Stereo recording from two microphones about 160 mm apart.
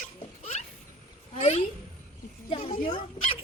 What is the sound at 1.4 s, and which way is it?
A woman's voice, 50° left (ahead or behind).